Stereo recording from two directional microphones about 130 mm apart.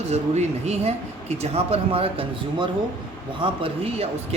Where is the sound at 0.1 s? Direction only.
55° right (ahead or behind).